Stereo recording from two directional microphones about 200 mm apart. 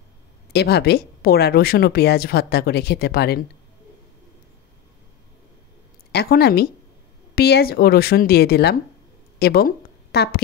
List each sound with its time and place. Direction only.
0.5 s speech: 55° left (ahead or behind)
6.1 s speech: 50° left (ahead or behind)